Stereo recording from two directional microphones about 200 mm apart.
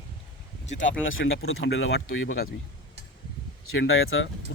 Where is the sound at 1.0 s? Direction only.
80° left.